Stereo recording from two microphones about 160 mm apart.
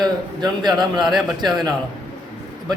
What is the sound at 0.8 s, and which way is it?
Speech, centre (ahead or behind).